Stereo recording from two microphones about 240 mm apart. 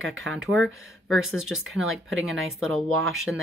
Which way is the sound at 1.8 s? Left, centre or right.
Right.